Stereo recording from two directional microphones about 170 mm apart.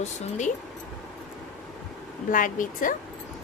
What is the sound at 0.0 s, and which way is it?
Speech, 45° left (ahead or behind).